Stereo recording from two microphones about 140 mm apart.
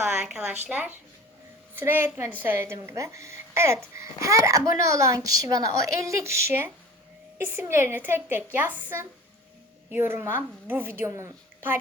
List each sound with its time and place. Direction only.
0.0 s a woman's voice: 10° right (ahead or behind)